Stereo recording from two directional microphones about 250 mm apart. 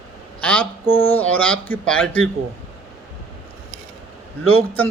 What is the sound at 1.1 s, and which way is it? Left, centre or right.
Speech, centre.